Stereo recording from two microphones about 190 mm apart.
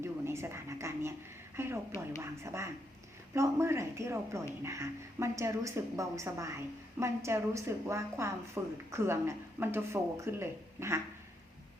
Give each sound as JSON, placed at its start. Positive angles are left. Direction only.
{"t": 0.0, "sound": "a woman's voice", "side_deg": -15}